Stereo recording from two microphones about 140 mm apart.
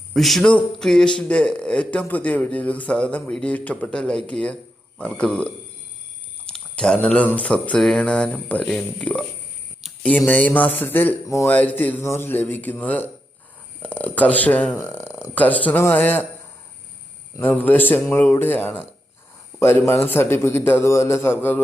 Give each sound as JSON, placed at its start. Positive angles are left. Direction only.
{"t": 0.1, "sound": "a man's voice", "side_deg": 0}
{"t": 17.3, "sound": "a man's voice", "side_deg": 15}